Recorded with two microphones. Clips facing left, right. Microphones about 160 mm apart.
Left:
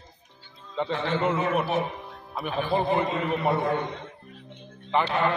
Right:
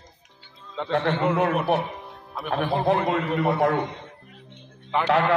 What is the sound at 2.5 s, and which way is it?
Speech, 70° right (ahead or behind).